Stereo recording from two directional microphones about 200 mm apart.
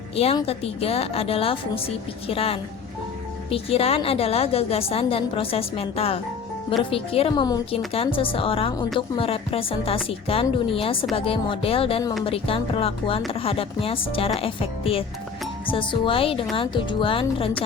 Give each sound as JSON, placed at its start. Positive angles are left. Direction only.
{"t": 0.2, "sound": "a woman's voice", "side_deg": 30}